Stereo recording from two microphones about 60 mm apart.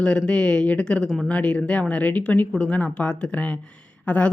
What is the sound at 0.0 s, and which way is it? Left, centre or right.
Speech, centre.